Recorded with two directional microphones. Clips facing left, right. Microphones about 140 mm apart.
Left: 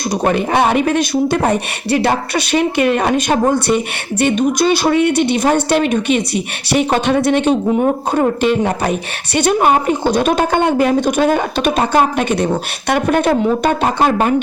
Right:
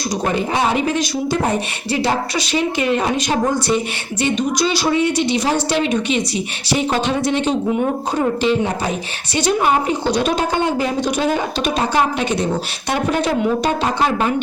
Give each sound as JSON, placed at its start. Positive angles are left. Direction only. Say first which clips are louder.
{"t": 0.3, "sound": "a woman's voice", "louder": "left 5 dB", "side_deg": 60}